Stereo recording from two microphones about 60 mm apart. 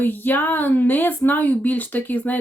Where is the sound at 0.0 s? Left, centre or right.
Left.